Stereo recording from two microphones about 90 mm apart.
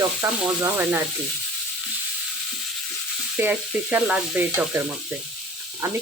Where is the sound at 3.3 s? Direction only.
20° right (ahead or behind).